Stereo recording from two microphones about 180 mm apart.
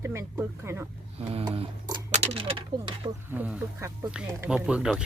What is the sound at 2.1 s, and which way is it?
Speech, 35° right (ahead or behind).